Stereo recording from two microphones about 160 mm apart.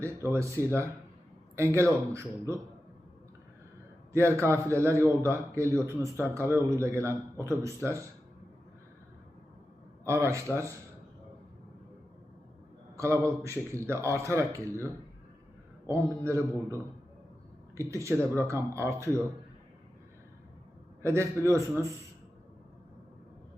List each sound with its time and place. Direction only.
0.0 s a man's voice: 15° right (ahead or behind)
4.4 s a man's voice: 15° right (ahead or behind)
10.0 s a man's voice: 15° right (ahead or behind)
13.0 s a man's voice: 15° right (ahead or behind)
15.9 s a man's voice: 20° right (ahead or behind)
21.0 s a man's voice: 15° right (ahead or behind)